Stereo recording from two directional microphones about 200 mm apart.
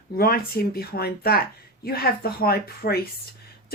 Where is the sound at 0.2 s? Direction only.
50° left (ahead or behind).